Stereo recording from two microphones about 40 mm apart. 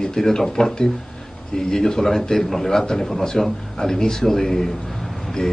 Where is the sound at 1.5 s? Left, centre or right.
Centre.